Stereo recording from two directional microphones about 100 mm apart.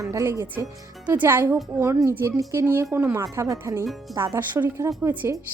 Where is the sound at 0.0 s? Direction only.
30° right (ahead or behind).